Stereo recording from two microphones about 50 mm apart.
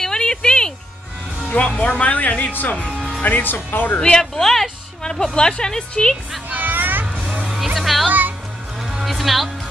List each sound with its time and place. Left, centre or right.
0.0 s music: centre
1.8 s speech: left
2.9 s music: centre
3.2 s speech: left
4.2 s speech: centre
5.2 s speech: centre
6.5 s a sound: right
7.4 s music: centre